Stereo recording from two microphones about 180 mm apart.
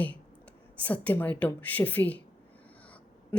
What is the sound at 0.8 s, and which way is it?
Speech, 10° left (ahead or behind).